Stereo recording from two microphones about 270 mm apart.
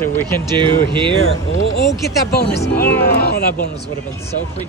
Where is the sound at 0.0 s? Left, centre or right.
Centre.